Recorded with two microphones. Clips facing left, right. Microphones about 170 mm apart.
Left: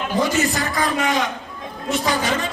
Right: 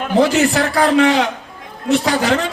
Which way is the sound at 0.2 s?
70° right (ahead or behind).